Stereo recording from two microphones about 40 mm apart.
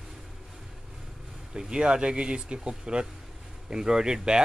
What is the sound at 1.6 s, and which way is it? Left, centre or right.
Speech, right.